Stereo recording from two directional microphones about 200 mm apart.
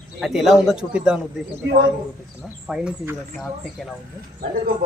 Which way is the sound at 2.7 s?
5° right (ahead or behind).